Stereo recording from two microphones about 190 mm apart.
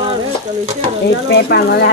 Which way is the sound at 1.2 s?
55° left (ahead or behind).